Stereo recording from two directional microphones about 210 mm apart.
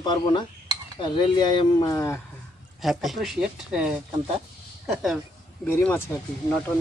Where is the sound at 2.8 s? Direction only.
Centre (ahead or behind).